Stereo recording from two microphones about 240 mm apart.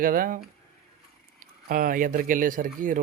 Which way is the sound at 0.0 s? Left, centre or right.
Right.